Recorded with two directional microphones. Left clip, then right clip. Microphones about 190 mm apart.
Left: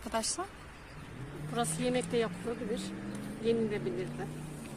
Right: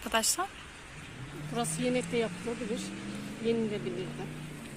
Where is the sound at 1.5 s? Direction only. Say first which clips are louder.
Right 1 dB; 35° right (ahead or behind).